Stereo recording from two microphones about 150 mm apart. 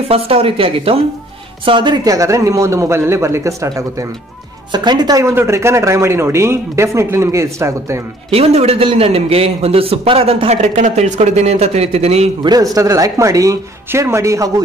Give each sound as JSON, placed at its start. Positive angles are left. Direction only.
{"t": 0.1, "sound": "speech", "side_deg": -40}
{"t": 8.3, "sound": "a man's voice", "side_deg": -45}
{"t": 12.7, "sound": "speech", "side_deg": -20}